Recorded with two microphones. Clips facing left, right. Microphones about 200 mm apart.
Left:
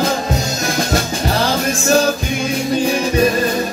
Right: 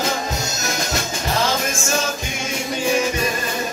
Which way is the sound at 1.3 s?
35° left (ahead or behind).